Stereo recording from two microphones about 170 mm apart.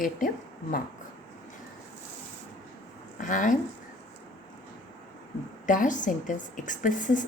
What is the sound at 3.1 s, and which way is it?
Speech, 50° left (ahead or behind).